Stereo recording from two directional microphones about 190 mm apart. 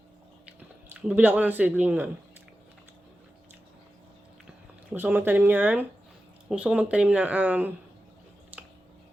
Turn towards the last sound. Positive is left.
turn(degrees=-10)  # may be behind; listen again after turning